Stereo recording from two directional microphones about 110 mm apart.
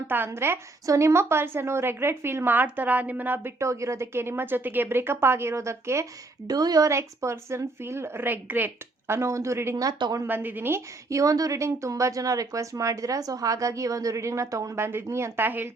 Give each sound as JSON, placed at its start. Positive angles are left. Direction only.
{"t": 0.3, "sound": "a woman's voice", "side_deg": -20}
{"t": 6.5, "sound": "a woman's voice", "side_deg": -35}
{"t": 10.2, "sound": "a woman's voice", "side_deg": -15}